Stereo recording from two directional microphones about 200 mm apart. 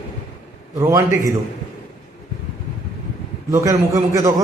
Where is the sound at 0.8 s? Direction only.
15° right (ahead or behind).